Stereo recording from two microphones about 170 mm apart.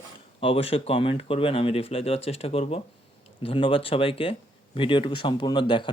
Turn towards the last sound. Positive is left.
turn(degrees=30)  # may be behind; listen again after turning